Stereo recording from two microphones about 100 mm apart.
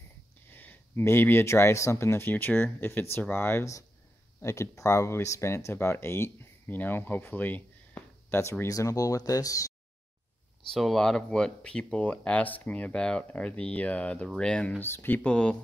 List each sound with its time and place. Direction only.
0.5 s speech: 20° left (ahead or behind)
8.4 s speech: 30° left (ahead or behind)
10.7 s speech: 5° left (ahead or behind)
14.8 s speech: 20° left (ahead or behind)